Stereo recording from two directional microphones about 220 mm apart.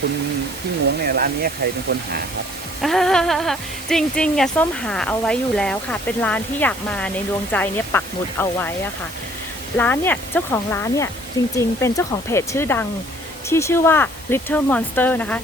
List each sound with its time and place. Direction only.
1.0 s speech: 45° right (ahead or behind)
2.8 s speech: centre (ahead or behind)
9.7 s speech: 10° left (ahead or behind)